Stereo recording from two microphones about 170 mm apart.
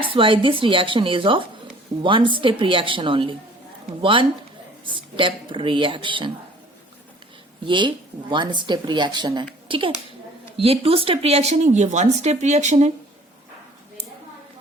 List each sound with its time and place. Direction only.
0.0 s speech: 30° right (ahead or behind)
7.6 s a child's voice: 30° right (ahead or behind)